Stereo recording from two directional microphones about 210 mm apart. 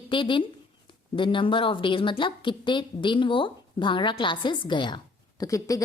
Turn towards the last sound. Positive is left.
turn(degrees=15)  # may be behind; listen again after turning